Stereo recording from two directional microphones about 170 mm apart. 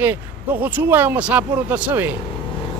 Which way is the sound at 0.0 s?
10° right (ahead or behind).